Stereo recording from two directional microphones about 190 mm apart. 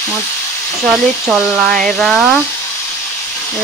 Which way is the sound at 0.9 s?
Centre (ahead or behind).